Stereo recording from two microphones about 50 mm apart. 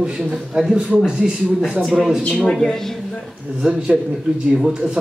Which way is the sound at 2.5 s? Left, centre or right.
Centre.